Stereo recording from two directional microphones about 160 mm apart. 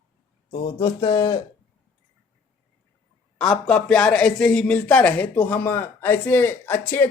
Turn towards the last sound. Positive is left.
turn(degrees=15)  # may be behind; listen again after turning